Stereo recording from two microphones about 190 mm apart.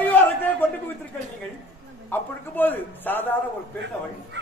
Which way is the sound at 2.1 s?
10° left (ahead or behind).